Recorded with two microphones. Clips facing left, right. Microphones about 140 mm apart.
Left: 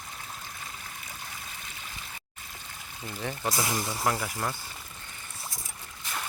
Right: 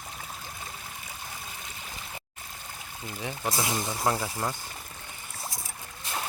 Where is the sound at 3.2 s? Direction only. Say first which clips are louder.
Left 1 dB; 10° right (ahead or behind).